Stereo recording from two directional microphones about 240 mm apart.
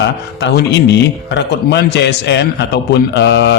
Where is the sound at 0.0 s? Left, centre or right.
Left.